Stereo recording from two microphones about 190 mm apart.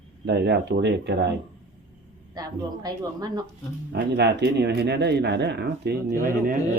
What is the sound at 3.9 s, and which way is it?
Speech, 65° right (ahead or behind).